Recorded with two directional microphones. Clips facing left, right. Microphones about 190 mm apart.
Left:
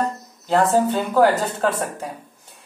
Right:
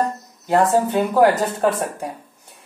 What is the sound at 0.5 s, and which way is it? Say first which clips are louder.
Speech: right 1 dB; 10° right (ahead or behind).